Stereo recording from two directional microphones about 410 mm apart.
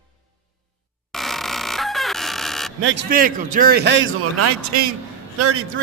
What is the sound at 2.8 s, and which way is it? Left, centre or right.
A man's voice, right.